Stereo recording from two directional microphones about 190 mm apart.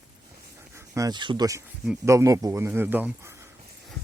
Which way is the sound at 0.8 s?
15° right (ahead or behind).